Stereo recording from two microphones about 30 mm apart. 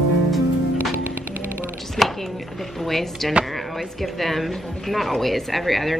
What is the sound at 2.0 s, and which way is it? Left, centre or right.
Chopping, left.